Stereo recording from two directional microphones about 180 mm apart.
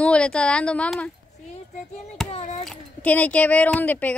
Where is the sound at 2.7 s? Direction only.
10° left (ahead or behind).